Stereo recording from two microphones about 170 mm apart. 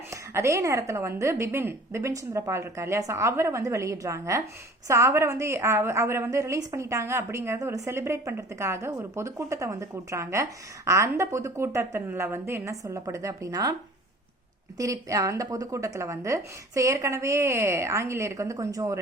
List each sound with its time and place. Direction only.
0.1 s a woman's voice: 15° right (ahead or behind)
14.8 s a woman's voice: 20° right (ahead or behind)